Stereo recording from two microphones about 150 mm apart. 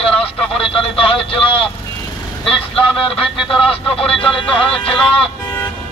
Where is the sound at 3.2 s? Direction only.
40° left (ahead or behind).